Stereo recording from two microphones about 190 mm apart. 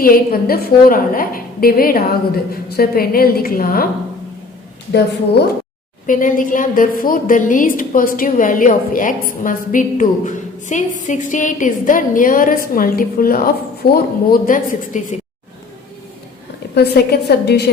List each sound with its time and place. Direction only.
0.0 s a woman's voice: 50° left (ahead or behind)
6.1 s a woman's voice: 45° left (ahead or behind)
16.7 s a woman's voice: 55° left (ahead or behind)